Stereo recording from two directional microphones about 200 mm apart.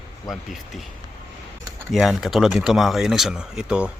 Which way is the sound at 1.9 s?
Centre (ahead or behind).